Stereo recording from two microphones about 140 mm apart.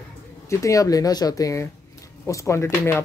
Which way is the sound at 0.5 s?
20° left (ahead or behind).